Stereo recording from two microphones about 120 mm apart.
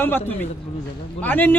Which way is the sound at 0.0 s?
15° left (ahead or behind).